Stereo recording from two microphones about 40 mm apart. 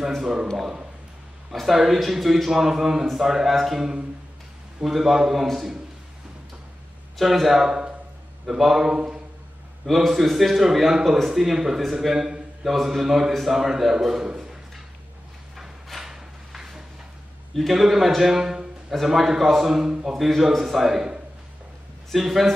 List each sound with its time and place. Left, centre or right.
0.1 s a man's voice: centre
1.5 s a man's voice: centre
7.2 s a man's voice: centre
8.9 s a sound: centre
9.8 s a man's voice: centre
12.6 s a man's voice: centre
15.5 s a sound: centre
17.6 s a man's voice: centre
22.1 s a man's voice: centre